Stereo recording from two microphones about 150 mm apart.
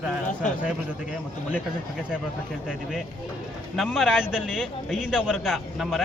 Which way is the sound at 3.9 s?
5° right (ahead or behind).